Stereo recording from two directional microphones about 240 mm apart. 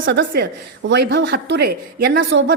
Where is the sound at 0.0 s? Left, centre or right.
Right.